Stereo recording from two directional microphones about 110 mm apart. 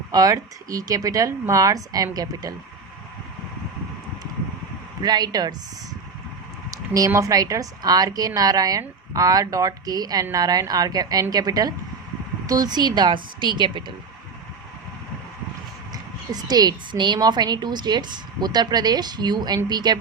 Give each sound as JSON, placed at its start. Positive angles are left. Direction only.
{"t": 0.1, "sound": "a woman's voice", "side_deg": -35}
{"t": 5.0, "sound": "a woman's voice", "side_deg": -40}
{"t": 6.7, "sound": "a woman's voice", "side_deg": -35}
{"t": 15.9, "sound": "a woman's voice", "side_deg": -40}